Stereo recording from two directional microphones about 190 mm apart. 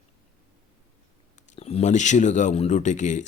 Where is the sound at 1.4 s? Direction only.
30° left (ahead or behind).